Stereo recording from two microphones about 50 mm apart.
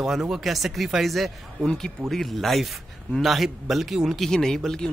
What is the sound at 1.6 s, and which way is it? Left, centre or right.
Speech, centre.